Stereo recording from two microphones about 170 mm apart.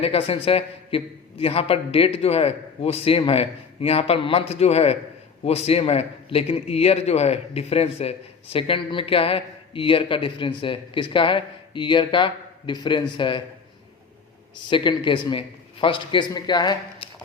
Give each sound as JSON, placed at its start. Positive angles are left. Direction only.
{"t": 0.0, "sound": "a man's voice", "side_deg": 35}
{"t": 14.5, "sound": "a man's voice", "side_deg": 30}